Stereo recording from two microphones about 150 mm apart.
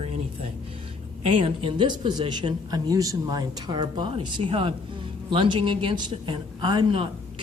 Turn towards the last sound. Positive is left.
turn(degrees=-35)  # may be behind; listen again after turning